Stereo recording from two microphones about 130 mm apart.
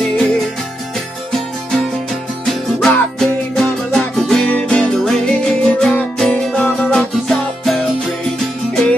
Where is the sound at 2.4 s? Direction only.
5° left (ahead or behind).